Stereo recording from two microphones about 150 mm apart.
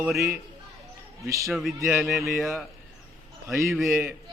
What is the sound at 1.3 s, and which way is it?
Speech, 20° right (ahead or behind).